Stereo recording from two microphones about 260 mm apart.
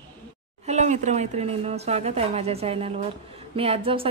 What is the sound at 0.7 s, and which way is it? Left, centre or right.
A woman's voice, right.